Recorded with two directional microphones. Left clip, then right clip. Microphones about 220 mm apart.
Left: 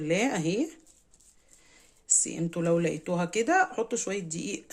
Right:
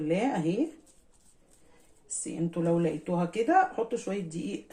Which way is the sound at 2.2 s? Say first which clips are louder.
Left 1 dB; 50° left (ahead or behind).